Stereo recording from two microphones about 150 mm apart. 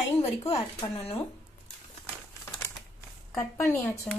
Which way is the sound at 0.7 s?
25° left (ahead or behind).